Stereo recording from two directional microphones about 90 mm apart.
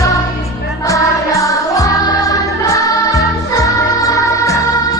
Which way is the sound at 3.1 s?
40° left (ahead or behind).